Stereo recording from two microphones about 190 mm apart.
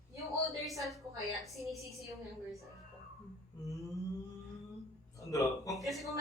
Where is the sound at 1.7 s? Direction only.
15° right (ahead or behind).